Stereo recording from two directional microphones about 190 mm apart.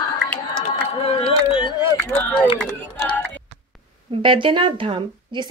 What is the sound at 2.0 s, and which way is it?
Run, 10° left (ahead or behind).